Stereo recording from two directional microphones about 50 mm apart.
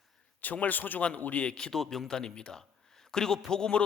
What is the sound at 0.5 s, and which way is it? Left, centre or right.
Speech, left.